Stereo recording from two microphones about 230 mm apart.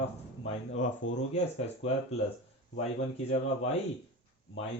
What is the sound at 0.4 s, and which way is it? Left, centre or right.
Speech, left.